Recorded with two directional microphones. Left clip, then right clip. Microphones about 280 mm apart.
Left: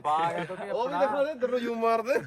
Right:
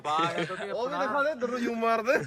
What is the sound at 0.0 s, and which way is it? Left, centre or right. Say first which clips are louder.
A man's voice: left 1 dB; left.